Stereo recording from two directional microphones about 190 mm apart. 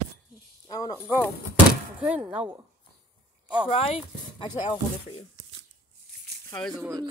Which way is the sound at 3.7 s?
35° left (ahead or behind).